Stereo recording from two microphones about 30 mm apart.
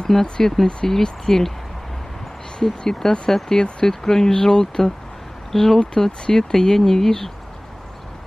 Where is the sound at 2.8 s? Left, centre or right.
Left.